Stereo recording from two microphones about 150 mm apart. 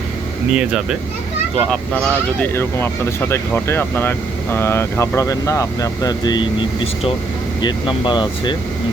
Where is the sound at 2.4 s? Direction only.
15° left (ahead or behind).